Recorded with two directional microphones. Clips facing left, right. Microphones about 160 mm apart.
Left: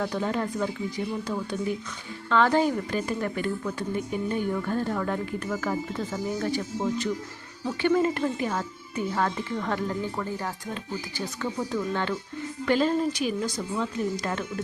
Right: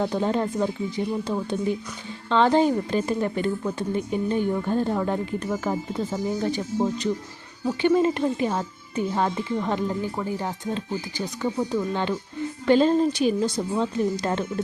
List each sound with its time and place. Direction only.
0.0 s speech: 25° right (ahead or behind)